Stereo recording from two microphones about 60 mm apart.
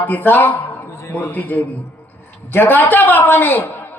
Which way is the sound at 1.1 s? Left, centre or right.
Left.